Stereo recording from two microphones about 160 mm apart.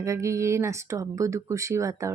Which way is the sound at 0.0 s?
20° right (ahead or behind).